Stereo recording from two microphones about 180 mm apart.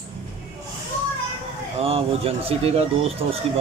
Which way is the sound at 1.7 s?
35° right (ahead or behind).